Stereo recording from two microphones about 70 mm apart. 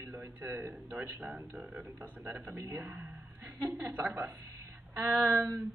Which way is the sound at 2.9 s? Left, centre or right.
Centre.